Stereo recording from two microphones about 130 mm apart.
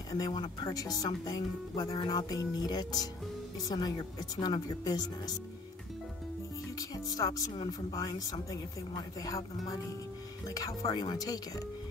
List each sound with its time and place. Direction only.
0.1 s speech: 30° left (ahead or behind)
7.1 s speech: 30° left (ahead or behind)
10.9 s speech: 30° left (ahead or behind)